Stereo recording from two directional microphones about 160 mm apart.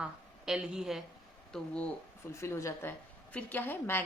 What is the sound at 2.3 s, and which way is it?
A woman's voice, 15° left (ahead or behind).